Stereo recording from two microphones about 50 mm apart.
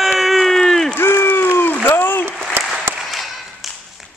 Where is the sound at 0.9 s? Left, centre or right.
Left.